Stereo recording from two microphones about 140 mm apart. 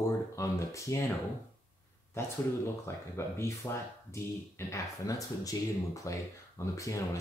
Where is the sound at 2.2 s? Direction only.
20° left (ahead or behind).